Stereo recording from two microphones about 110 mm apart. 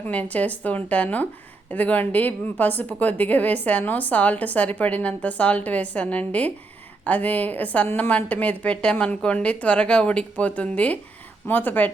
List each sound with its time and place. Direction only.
0.1 s a woman's voice: 15° left (ahead or behind)